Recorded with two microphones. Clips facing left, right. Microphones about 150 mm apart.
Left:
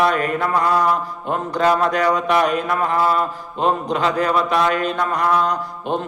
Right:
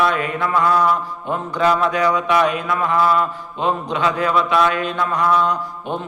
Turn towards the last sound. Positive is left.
turn(degrees=40)  # may be behind; listen again after turning